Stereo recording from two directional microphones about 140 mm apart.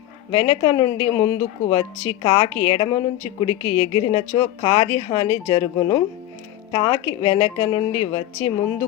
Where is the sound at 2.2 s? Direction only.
40° left (ahead or behind).